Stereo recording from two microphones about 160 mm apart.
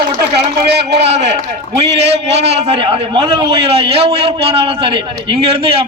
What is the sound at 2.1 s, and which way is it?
A man's voice, 40° right (ahead or behind).